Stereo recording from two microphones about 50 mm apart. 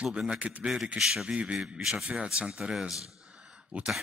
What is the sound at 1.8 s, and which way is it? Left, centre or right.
Speech, centre.